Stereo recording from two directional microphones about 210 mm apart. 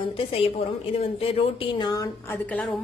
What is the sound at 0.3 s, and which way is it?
A woman's voice, 30° left (ahead or behind).